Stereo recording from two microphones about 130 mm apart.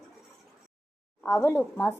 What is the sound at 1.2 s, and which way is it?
Speech, 20° left (ahead or behind).